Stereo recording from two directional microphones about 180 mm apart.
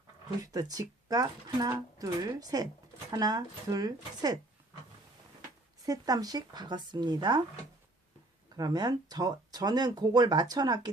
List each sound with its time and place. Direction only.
0.4 s speech: 20° right (ahead or behind)
5.8 s speech: 20° right (ahead or behind)
8.5 s speech: 20° right (ahead or behind)